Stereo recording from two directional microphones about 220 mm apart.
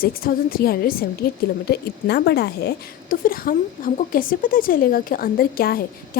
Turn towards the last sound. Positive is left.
turn(degrees=45)  # may be behind; listen again after turning